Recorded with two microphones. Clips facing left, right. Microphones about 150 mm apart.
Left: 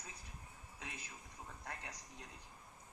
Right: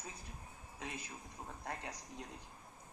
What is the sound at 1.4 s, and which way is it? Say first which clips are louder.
Speech: right 5 dB; 35° right (ahead or behind).